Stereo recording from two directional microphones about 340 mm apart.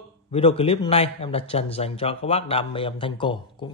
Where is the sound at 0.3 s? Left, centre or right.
Centre.